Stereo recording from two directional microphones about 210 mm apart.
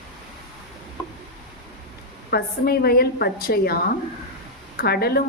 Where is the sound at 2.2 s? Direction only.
45° left (ahead or behind).